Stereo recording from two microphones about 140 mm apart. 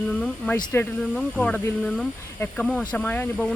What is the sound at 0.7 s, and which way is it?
Speech, 15° left (ahead or behind).